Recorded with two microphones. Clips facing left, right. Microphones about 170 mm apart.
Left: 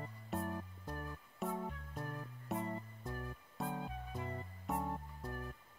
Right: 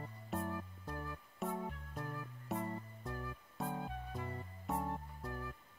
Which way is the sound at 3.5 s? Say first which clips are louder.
Even; centre (ahead or behind).